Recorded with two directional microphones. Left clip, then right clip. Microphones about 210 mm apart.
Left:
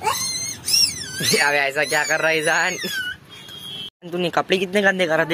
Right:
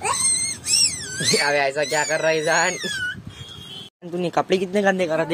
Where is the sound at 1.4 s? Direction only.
Centre (ahead or behind).